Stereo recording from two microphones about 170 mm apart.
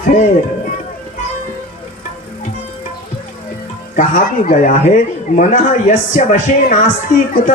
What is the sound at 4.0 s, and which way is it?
A man's voice, 50° left (ahead or behind).